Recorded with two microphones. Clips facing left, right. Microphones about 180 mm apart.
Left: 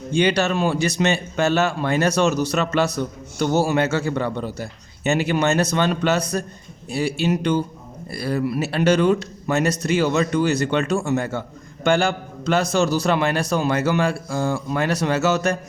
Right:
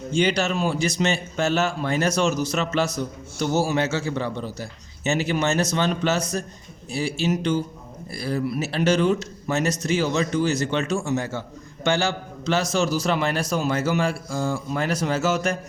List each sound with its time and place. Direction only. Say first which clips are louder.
0.1 s speech: left 3 dB; 60° left (ahead or behind)